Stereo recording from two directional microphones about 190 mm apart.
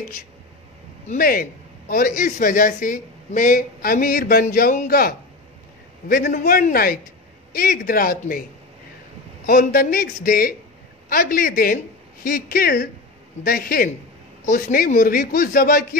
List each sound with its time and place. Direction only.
1.0 s a man's voice: 50° left (ahead or behind)
9.5 s a man's voice: 50° left (ahead or behind)